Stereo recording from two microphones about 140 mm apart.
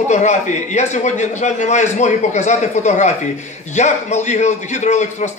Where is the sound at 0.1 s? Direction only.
55° left (ahead or behind).